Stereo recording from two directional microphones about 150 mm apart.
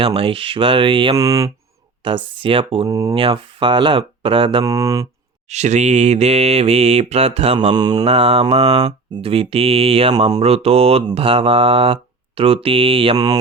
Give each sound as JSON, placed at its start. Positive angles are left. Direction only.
{"t": 0.0, "sound": "mantra", "side_deg": -40}
{"t": 1.1, "sound": "mantra", "side_deg": -20}
{"t": 2.0, "sound": "mantra", "side_deg": -35}
{"t": 2.9, "sound": "mantra", "side_deg": -25}
{"t": 3.2, "sound": "mantra", "side_deg": -35}
{"t": 4.6, "sound": "mantra", "side_deg": -20}
{"t": 5.5, "sound": "mantra", "side_deg": -50}
{"t": 7.8, "sound": "mantra", "side_deg": -25}
{"t": 8.0, "sound": "mantra", "side_deg": -40}